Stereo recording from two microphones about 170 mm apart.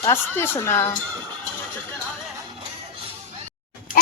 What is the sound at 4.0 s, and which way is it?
Goat, 55° left (ahead or behind).